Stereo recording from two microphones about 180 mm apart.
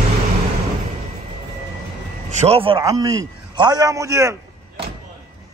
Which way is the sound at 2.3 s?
35° right (ahead or behind).